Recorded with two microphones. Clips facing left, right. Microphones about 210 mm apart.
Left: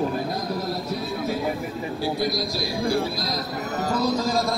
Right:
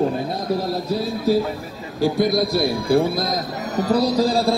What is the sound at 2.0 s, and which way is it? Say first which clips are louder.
A man's voice: right 8 dB; 50° right (ahead or behind).